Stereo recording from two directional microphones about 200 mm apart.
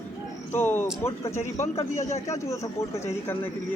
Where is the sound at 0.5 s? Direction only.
10° left (ahead or behind).